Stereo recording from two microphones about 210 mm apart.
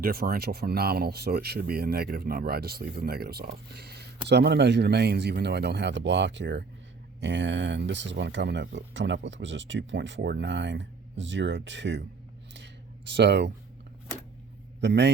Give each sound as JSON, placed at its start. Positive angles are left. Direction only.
{"t": 0.0, "sound": "speech", "side_deg": -45}
{"t": 12.5, "sound": "a sound", "side_deg": -55}
{"t": 14.8, "sound": "speech", "side_deg": -55}